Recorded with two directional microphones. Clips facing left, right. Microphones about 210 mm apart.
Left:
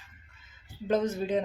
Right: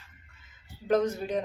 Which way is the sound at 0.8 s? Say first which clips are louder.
Right 1 dB; 25° left (ahead or behind).